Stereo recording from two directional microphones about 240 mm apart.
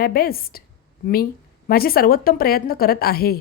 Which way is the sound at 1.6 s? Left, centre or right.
Left.